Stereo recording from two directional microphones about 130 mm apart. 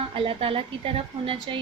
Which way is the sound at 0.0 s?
45° right (ahead or behind).